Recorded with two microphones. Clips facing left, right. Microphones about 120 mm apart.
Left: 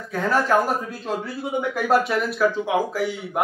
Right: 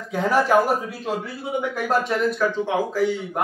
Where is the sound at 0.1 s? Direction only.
10° right (ahead or behind).